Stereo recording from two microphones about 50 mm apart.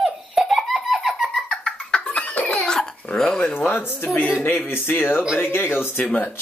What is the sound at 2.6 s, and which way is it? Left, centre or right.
Dog, centre.